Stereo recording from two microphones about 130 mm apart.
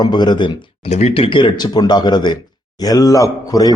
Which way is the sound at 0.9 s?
55° left (ahead or behind).